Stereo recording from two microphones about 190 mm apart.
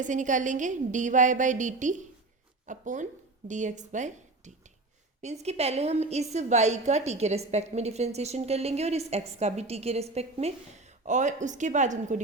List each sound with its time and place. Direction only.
0.0 s a woman's voice: 40° right (ahead or behind)